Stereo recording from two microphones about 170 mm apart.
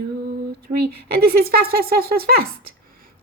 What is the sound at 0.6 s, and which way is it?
A woman's voice, 65° right (ahead or behind).